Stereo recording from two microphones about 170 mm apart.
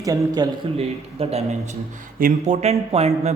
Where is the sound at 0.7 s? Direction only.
35° right (ahead or behind).